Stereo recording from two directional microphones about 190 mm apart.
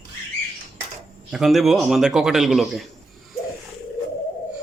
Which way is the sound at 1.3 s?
Centre (ahead or behind).